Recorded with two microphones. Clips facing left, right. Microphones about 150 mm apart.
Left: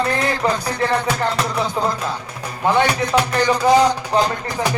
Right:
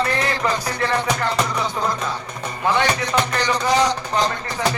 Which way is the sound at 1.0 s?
5° left (ahead or behind).